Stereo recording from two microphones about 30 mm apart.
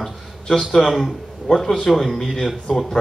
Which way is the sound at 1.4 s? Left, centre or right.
Centre.